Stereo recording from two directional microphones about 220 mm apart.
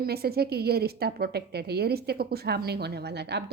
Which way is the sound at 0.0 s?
45° right (ahead or behind).